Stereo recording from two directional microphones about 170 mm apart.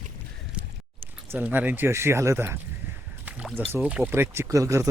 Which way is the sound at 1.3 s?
10° right (ahead or behind).